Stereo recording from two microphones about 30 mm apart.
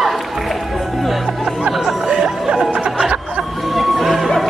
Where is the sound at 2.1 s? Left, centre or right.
Right.